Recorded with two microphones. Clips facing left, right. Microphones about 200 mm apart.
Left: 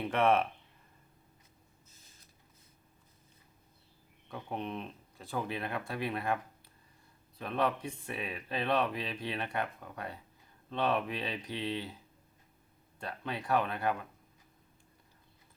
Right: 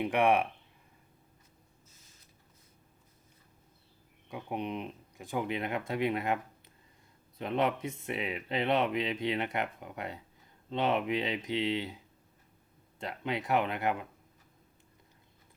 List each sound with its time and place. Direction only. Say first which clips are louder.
0.0 s speech: right 1 dB; 15° right (ahead or behind)
4.3 s speech: right 3 dB; 15° right (ahead or behind)
13.0 s speech: right 4 dB; 20° right (ahead or behind)